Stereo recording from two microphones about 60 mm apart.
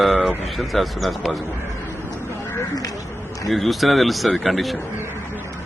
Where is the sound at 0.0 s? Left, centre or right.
Centre.